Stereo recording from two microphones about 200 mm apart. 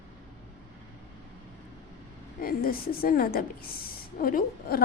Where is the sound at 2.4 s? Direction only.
45° left (ahead or behind).